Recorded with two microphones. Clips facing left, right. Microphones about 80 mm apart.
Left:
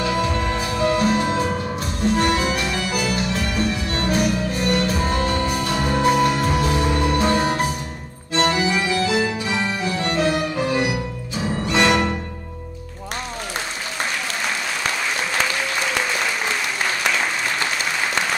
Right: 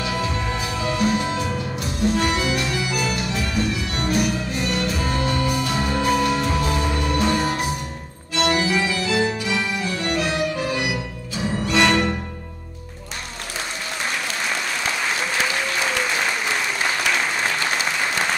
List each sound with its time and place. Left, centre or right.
0.2 s music: left
11.6 s music: centre